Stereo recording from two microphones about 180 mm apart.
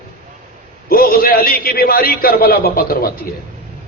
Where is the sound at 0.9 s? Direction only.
55° left (ahead or behind).